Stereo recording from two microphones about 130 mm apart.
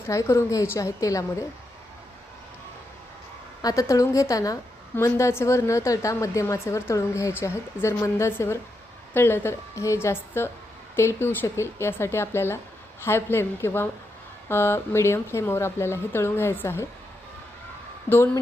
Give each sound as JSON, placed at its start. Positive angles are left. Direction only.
{"t": 0.0, "sound": "speech", "side_deg": 20}
{"t": 3.6, "sound": "speech", "side_deg": 25}